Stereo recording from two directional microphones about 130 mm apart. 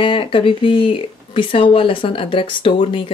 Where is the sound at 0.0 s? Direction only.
40° left (ahead or behind).